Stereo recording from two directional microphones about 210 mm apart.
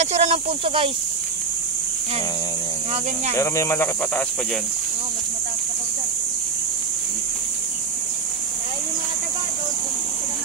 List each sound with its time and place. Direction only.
0.0 s speech: 30° right (ahead or behind)
3.3 s speech: 15° left (ahead or behind)